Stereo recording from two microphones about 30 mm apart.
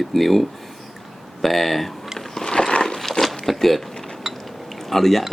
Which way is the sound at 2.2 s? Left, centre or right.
Centre.